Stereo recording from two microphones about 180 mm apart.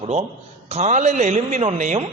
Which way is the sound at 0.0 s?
35° right (ahead or behind).